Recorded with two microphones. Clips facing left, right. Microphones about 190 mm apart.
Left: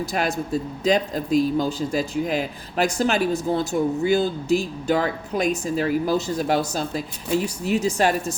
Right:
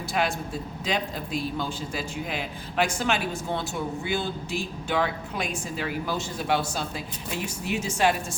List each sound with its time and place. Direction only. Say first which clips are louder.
0.0 s a man's voice: left 3 dB; 40° left (ahead or behind)